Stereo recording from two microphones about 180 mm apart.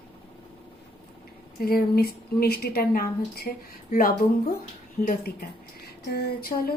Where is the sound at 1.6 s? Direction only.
55° left (ahead or behind).